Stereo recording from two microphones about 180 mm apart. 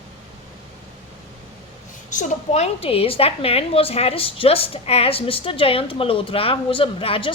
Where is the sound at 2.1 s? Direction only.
40° left (ahead or behind).